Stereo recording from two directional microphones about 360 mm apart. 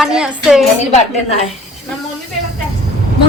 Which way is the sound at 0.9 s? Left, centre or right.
Centre.